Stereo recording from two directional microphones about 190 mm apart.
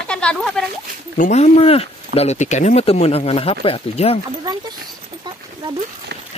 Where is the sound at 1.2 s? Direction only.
35° left (ahead or behind).